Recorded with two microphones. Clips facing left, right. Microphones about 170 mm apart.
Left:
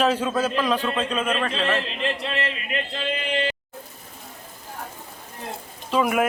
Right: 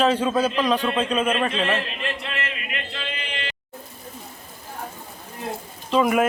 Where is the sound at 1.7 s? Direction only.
30° left (ahead or behind).